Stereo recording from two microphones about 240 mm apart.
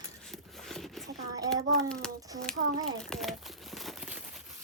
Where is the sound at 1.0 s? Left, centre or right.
Centre.